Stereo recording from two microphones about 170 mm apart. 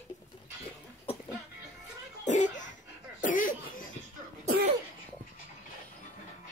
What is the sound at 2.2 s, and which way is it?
Cough, 45° left (ahead or behind).